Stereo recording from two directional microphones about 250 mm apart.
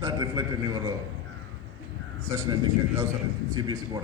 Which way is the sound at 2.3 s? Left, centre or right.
Centre.